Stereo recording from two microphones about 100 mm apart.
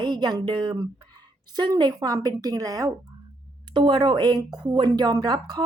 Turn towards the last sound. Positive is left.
turn(degrees=-45)  # may be behind; listen again after turning